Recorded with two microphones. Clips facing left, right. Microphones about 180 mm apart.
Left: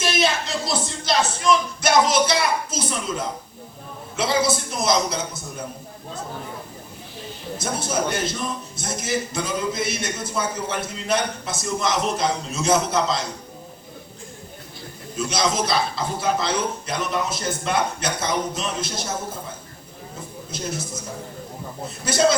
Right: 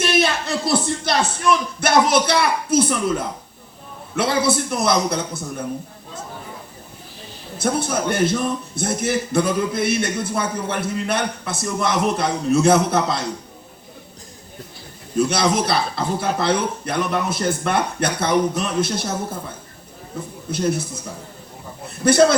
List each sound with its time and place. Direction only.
0.0 s a man's voice: 60° right (ahead or behind)
7.6 s a man's voice: 60° right (ahead or behind)
15.1 s a man's voice: 60° right (ahead or behind)
20.5 s a man's voice: 60° right (ahead or behind)
21.8 s a man's voice: 60° right (ahead or behind)